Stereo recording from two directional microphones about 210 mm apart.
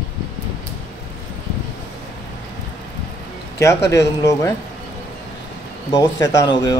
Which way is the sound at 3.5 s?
15° left (ahead or behind).